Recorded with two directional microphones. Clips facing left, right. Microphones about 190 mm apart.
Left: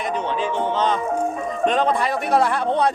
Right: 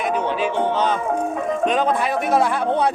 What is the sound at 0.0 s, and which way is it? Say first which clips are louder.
Speech: right 2 dB; 10° right (ahead or behind).